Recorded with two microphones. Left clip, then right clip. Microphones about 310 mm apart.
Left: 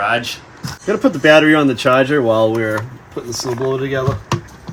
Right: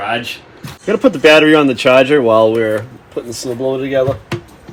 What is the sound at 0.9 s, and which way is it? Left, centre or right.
Speech, centre.